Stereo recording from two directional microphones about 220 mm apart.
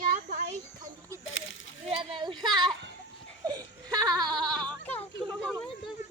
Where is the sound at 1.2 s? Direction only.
60° left (ahead or behind).